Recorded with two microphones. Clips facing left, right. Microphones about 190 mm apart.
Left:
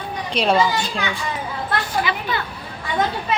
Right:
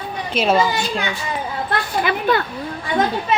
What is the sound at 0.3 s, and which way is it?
Speech, 5° right (ahead or behind).